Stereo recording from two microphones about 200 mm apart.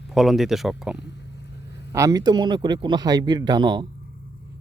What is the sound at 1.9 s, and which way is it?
Speech, 15° right (ahead or behind).